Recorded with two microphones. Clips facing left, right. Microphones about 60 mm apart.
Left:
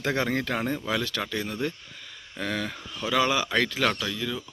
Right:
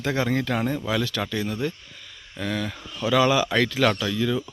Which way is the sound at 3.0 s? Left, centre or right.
Centre.